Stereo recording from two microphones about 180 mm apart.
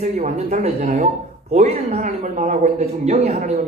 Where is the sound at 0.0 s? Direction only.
40° right (ahead or behind).